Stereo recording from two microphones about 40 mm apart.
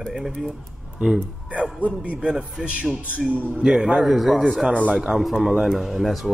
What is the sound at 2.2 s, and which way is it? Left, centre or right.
Speech, right.